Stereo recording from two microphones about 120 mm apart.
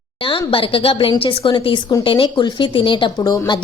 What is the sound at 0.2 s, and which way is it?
Speech, 45° left (ahead or behind).